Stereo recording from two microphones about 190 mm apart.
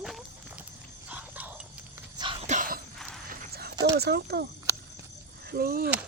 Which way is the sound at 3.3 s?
50° right (ahead or behind).